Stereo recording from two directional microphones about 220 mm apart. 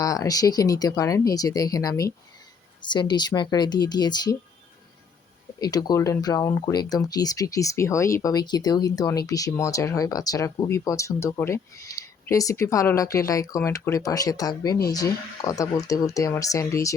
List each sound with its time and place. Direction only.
0.0 s speech: 15° left (ahead or behind)
5.5 s speech: 15° left (ahead or behind)